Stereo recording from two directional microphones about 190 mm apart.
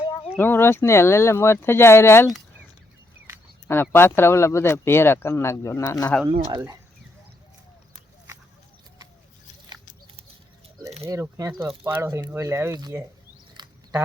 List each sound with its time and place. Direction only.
0.3 s speech: 10° left (ahead or behind)
3.7 s speech: 10° left (ahead or behind)
6.5 s speech: 20° right (ahead or behind)
11.0 s speech: 15° right (ahead or behind)
13.6 s a sound: 20° right (ahead or behind)